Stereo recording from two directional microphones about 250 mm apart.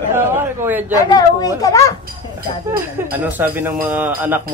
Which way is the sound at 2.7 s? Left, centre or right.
Centre.